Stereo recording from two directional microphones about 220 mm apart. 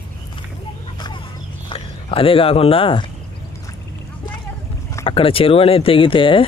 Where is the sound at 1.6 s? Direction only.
25° left (ahead or behind).